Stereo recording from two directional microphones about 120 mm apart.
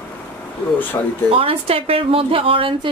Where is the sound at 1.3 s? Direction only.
50° right (ahead or behind).